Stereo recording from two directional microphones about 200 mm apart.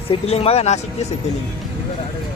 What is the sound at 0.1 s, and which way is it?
Speech, 30° left (ahead or behind).